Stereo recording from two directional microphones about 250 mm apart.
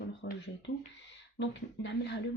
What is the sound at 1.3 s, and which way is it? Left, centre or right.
Speech, left.